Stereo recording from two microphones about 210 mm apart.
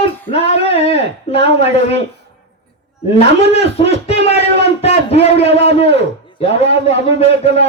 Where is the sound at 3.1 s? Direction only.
30° left (ahead or behind).